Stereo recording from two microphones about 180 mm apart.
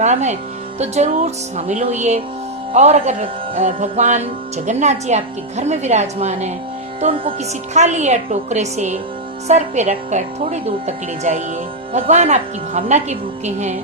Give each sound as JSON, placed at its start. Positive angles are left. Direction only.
{"t": 0.0, "sound": "speech", "side_deg": -40}